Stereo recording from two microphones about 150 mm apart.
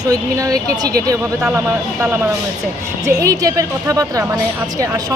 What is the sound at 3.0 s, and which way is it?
Speech, 20° right (ahead or behind).